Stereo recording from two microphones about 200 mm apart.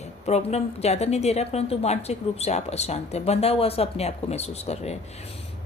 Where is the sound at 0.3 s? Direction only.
30° left (ahead or behind).